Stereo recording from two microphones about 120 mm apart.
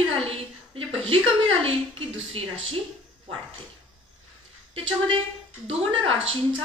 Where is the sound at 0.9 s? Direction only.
50° right (ahead or behind).